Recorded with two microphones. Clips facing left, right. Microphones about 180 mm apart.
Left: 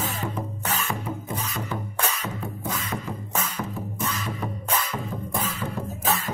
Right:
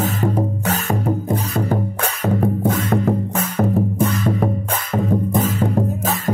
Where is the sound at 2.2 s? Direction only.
60° right (ahead or behind).